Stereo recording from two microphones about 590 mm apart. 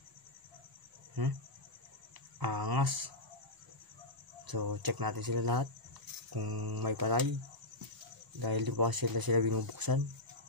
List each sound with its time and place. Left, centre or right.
1.2 s speech: right
2.4 s speech: right
4.5 s speech: right
8.4 s speech: right